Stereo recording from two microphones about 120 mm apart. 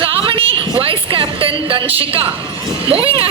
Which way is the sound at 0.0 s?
50° right (ahead or behind).